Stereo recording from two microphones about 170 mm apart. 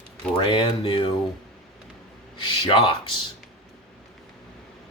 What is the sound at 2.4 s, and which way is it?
Speech, 30° left (ahead or behind).